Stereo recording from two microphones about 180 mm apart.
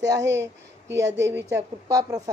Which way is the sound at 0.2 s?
80° right.